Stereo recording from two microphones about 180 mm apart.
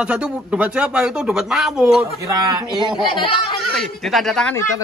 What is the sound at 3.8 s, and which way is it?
Speech, centre (ahead or behind).